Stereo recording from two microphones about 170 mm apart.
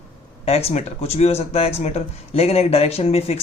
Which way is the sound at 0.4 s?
35° left (ahead or behind).